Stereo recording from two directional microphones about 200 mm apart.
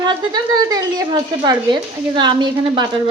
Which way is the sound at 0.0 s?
20° right (ahead or behind).